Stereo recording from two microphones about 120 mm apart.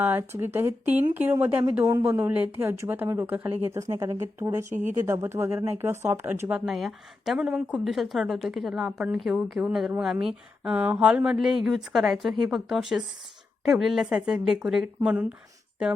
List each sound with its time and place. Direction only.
0.0 s speech: 15° right (ahead or behind)
3.8 s speech: 25° right (ahead or behind)
6.7 s a woman's voice: centre (ahead or behind)